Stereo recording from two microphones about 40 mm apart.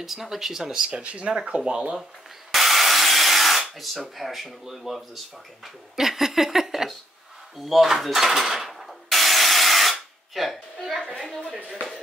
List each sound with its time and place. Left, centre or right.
0.0 s speech: centre
0.7 s speech: right
1.6 s speech: centre
2.5 s tools: centre
4.6 s dishes: centre
5.9 s speech: centre
7.5 s dishes: centre
8.6 s a sound: centre
11.1 s dishes: centre